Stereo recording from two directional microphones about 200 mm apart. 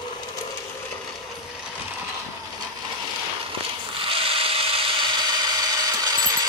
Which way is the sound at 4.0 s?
25° right (ahead or behind).